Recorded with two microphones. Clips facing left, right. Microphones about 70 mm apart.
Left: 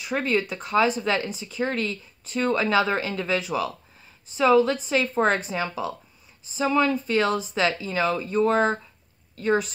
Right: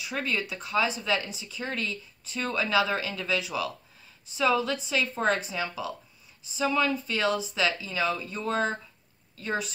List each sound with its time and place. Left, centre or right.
0.0 s a woman's voice: left